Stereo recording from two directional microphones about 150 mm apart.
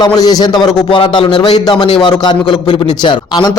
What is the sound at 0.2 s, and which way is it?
A man's voice, 25° left (ahead or behind).